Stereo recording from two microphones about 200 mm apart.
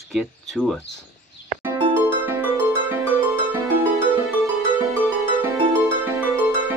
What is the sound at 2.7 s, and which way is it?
Music, 10° right (ahead or behind).